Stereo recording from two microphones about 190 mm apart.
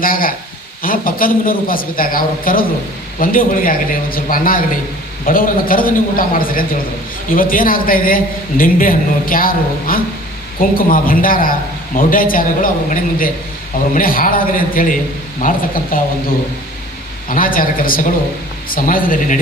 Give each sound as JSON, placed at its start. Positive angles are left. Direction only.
{"t": 0.0, "sound": "a man's voice", "side_deg": 50}
{"t": 17.2, "sound": "a man's voice", "side_deg": 45}